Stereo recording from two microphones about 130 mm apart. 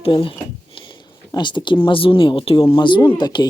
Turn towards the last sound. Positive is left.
turn(degrees=35)  # may be behind; listen again after turning